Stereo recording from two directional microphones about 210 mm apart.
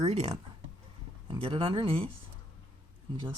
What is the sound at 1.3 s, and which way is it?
Speech, 25° right (ahead or behind).